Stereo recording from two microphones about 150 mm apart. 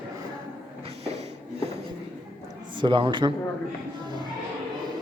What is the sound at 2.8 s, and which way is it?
Speech, 30° right (ahead or behind).